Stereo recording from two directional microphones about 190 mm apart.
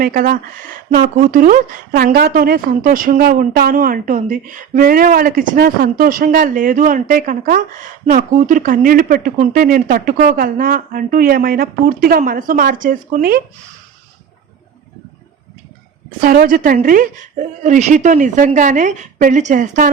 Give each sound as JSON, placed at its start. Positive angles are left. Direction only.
{"t": 0.0, "sound": "speech", "side_deg": -50}
{"t": 16.2, "sound": "a woman's voice", "side_deg": -50}